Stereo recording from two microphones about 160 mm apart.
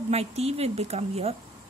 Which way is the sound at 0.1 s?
40° right (ahead or behind).